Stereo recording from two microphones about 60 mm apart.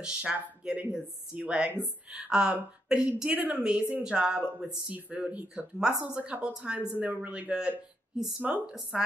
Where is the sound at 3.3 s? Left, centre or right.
Right.